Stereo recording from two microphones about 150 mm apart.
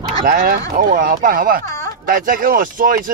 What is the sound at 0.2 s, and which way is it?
Speech, 70° right (ahead or behind).